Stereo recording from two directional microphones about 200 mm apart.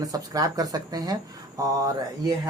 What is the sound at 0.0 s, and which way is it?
Speech, 20° right (ahead or behind).